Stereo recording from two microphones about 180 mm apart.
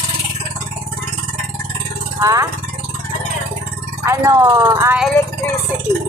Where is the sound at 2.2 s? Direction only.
20° right (ahead or behind).